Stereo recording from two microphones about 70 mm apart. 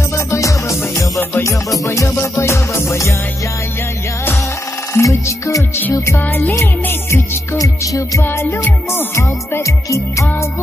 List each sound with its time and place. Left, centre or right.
0.3 s music: left
4.9 s music: left
6.1 s music: left
6.5 s music: left
7.5 s music: left
8.2 s music: left
9.8 s music: left